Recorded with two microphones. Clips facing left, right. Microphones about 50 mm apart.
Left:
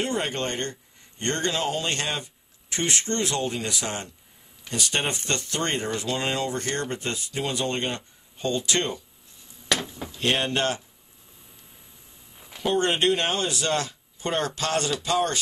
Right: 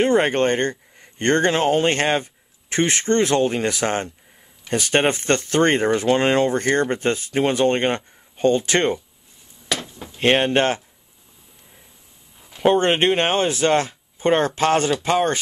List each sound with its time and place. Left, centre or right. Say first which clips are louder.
0.0 s speech: right 10 dB; right
9.7 s a sound: even; centre
10.1 s speech: right 8 dB; right
12.5 s speech: right 7 dB; right